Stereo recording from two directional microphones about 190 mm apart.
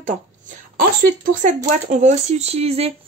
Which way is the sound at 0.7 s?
45° right (ahead or behind).